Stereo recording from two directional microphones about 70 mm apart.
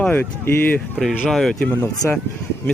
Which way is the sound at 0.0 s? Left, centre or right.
Left.